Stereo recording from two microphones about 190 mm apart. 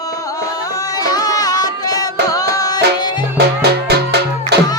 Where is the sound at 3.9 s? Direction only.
60° right (ahead or behind).